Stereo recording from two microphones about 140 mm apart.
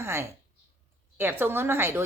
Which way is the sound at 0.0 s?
15° right (ahead or behind).